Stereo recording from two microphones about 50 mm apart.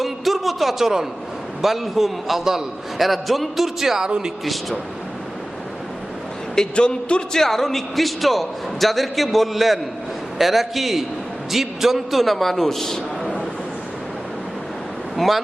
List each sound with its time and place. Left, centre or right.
0.0 s a sound: centre
1.6 s a man's voice: centre
6.6 s speech: centre
7.3 s a man's voice: centre
15.1 s speech: centre